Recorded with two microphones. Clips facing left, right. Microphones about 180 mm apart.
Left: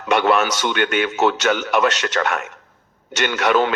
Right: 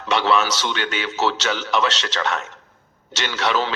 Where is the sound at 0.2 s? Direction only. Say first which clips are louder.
Left 2 dB; 55° left (ahead or behind).